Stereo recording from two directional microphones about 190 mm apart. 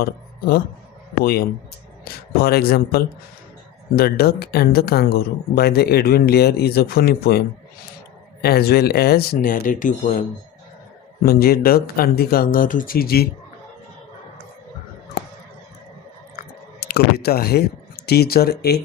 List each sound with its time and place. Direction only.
0.0 s speech: 55° left (ahead or behind)
11.3 s speech: 55° left (ahead or behind)
16.9 s speech: 55° left (ahead or behind)